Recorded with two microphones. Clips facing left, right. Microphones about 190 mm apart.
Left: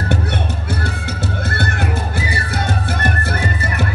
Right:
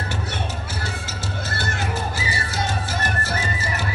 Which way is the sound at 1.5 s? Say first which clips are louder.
Left 3 dB; 60° left (ahead or behind).